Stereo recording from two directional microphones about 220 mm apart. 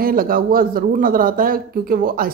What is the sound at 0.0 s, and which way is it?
Speech, 40° right (ahead or behind).